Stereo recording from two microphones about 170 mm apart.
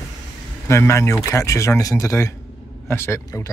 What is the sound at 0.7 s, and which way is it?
Speech, 15° left (ahead or behind).